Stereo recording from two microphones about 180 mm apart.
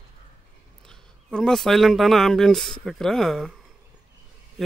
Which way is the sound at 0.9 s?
5° left (ahead or behind).